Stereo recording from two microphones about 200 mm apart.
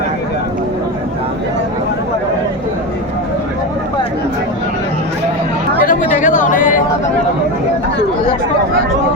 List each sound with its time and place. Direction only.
5.8 s chatter: 40° left (ahead or behind)